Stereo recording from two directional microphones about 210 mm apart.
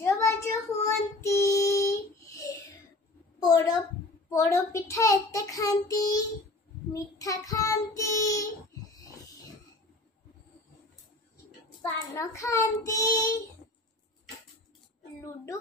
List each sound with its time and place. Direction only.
0.0 s child singing: 15° left (ahead or behind)
3.3 s a sound: 20° left (ahead or behind)
4.3 s a child's voice: 15° left (ahead or behind)
12.2 s a child's voice: 15° left (ahead or behind)